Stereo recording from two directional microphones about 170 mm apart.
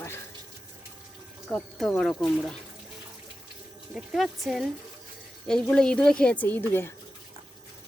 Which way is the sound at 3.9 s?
Centre (ahead or behind).